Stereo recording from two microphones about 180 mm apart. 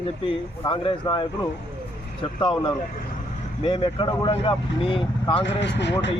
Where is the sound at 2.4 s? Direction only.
25° left (ahead or behind).